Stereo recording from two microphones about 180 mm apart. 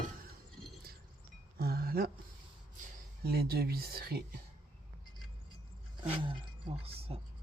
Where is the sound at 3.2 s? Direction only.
60° right (ahead or behind).